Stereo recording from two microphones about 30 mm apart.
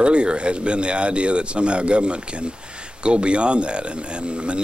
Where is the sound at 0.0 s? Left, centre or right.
Right.